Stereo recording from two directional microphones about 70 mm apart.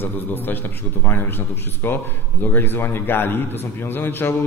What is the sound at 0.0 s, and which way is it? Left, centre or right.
A man's voice, left.